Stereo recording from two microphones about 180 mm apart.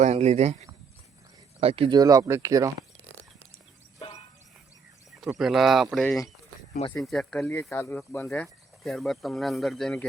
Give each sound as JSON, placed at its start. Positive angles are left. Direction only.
{"t": 0.0, "sound": "speech", "side_deg": -40}
{"t": 1.6, "sound": "speech", "side_deg": -30}
{"t": 5.2, "sound": "speech", "side_deg": 0}
{"t": 6.1, "sound": "speech", "side_deg": 15}
{"t": 6.9, "sound": "speech", "side_deg": 0}
{"t": 8.8, "sound": "speech", "side_deg": 0}